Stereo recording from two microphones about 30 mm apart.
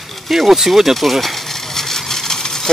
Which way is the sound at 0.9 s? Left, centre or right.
Centre.